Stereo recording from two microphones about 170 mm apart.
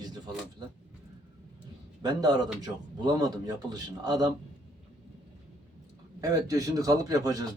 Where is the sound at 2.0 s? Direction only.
25° right (ahead or behind).